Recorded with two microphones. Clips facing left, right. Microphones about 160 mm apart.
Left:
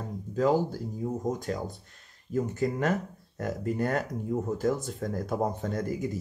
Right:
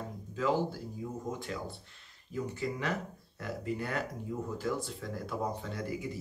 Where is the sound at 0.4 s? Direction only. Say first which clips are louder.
Left 6 dB; 40° left (ahead or behind).